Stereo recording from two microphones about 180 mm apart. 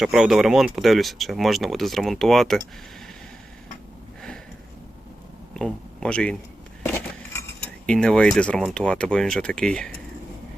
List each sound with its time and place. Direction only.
0.0 s speech: centre (ahead or behind)
5.5 s speech: 5° left (ahead or behind)
6.8 s a sound: 10° left (ahead or behind)
7.9 s speech: 5° left (ahead or behind)